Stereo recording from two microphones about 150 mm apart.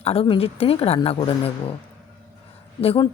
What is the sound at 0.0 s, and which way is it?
Speech, 40° left (ahead or behind).